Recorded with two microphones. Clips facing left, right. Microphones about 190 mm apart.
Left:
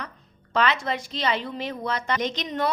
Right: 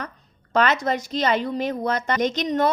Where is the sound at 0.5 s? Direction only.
45° right (ahead or behind).